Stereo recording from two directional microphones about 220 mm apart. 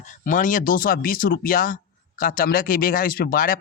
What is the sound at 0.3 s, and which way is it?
Speech, 35° left (ahead or behind).